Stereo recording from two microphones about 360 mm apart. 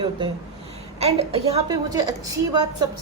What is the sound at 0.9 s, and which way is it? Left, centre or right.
A woman's voice, centre.